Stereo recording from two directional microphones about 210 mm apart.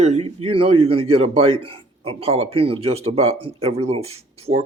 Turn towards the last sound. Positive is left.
turn(degrees=-30)  # may be behind; listen again after turning